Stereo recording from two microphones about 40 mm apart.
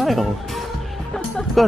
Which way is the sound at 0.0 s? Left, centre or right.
Centre.